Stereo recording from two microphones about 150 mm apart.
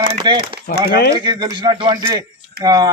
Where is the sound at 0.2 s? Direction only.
30° right (ahead or behind).